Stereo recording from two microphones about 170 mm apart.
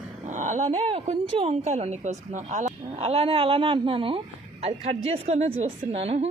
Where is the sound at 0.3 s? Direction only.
45° right (ahead or behind).